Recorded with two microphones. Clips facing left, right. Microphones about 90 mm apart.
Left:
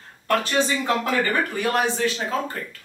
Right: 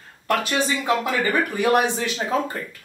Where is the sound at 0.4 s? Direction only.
10° right (ahead or behind).